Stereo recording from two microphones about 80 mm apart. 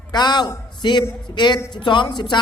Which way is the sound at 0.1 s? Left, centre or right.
Left.